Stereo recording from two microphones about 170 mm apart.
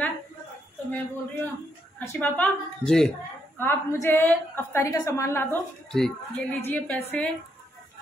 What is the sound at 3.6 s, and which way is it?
A woman's voice, 15° left (ahead or behind).